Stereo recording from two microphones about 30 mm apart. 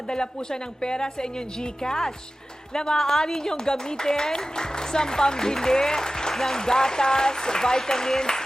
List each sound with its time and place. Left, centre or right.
0.1 s speech: left